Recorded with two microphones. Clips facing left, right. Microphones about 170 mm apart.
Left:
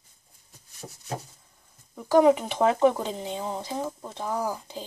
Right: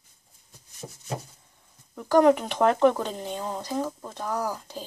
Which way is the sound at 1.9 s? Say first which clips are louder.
Even; 10° left (ahead or behind).